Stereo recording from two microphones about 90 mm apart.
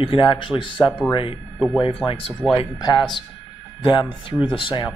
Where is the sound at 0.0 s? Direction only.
80° left; by 1.0 s 60° left (ahead or behind).